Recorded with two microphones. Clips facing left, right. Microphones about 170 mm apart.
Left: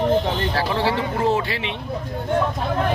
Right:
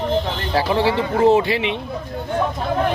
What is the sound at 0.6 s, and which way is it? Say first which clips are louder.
Speech: right 7 dB; 15° right (ahead or behind).